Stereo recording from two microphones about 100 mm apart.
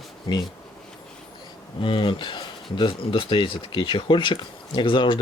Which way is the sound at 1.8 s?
55° left (ahead or behind).